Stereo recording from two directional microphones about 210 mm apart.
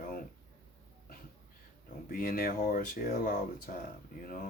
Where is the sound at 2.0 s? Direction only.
45° left (ahead or behind).